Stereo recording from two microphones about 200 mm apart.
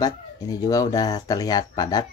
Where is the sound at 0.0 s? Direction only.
15° left (ahead or behind).